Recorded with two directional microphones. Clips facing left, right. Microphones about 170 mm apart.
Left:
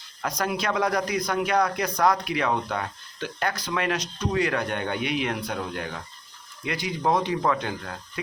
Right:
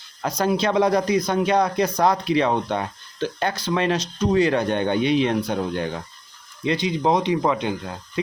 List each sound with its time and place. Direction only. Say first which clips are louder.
0.2 s speech: right 6 dB; 25° right (ahead or behind)